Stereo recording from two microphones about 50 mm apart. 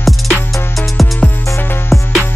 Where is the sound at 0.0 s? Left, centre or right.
Centre.